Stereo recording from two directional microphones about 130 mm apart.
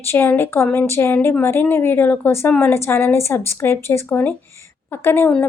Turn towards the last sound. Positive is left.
turn(degrees=15)  # may be behind; listen again after turning